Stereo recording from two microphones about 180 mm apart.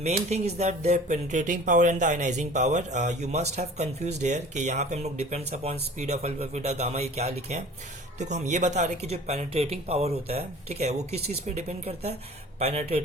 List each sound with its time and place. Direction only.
0.0 s speech: 35° right (ahead or behind)